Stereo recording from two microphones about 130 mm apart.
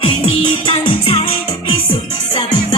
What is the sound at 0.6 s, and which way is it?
Music, 45° left (ahead or behind).